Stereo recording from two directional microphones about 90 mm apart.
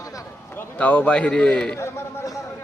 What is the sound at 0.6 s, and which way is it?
A man's voice, 15° left (ahead or behind).